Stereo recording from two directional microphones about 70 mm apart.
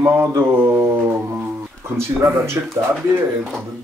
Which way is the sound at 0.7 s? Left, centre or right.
Right.